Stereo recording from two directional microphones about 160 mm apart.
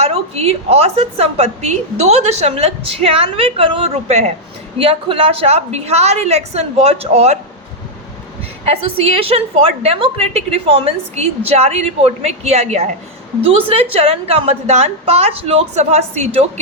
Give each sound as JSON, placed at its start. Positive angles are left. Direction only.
{"t": 0.0, "sound": "a woman's voice", "side_deg": -40}
{"t": 8.6, "sound": "a woman's voice", "side_deg": -40}